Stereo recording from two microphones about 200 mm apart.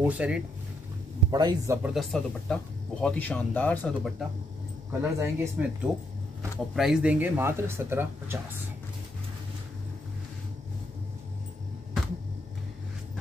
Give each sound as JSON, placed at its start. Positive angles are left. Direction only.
{"t": 0.0, "sound": "speech", "side_deg": -5}
{"t": 1.3, "sound": "a man's voice", "side_deg": -20}
{"t": 1.8, "sound": "speech", "side_deg": 0}
{"t": 5.0, "sound": "speech", "side_deg": -10}